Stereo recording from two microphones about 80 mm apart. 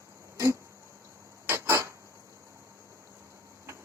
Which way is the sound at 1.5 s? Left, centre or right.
Right.